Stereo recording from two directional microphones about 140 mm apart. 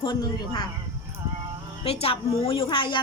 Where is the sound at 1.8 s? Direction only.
45° left (ahead or behind).